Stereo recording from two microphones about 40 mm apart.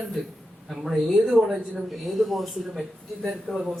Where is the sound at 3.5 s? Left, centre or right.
Left.